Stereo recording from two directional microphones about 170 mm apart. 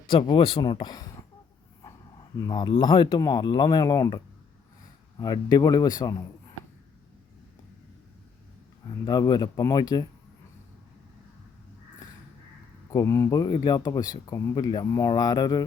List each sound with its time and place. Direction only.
0.1 s speech: 30° left (ahead or behind)
2.4 s speech: 25° left (ahead or behind)
5.2 s speech: 20° left (ahead or behind)
9.0 s speech: 25° left (ahead or behind)
12.9 s speech: 20° left (ahead or behind)